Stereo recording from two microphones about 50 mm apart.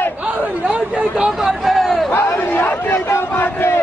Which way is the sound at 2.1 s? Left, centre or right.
Left.